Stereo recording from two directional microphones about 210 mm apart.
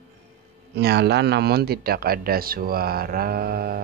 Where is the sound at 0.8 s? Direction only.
50° right (ahead or behind).